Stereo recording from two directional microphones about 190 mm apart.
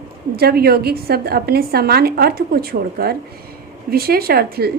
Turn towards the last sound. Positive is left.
turn(degrees=-55)  # may be behind; listen again after turning